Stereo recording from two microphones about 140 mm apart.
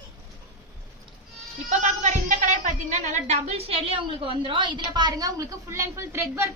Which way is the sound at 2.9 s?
60° right (ahead or behind).